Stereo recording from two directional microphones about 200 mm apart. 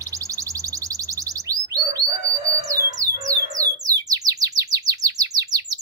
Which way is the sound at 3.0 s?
15° right (ahead or behind).